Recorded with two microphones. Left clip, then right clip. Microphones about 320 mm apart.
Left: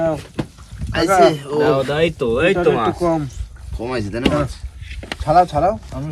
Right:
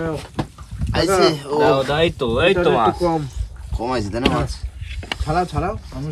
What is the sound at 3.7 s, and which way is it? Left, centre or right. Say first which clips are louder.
Speech: right 1 dB; right.